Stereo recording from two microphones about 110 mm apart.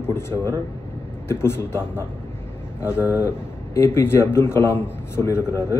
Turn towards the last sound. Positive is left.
turn(degrees=25)  # may be behind; listen again after turning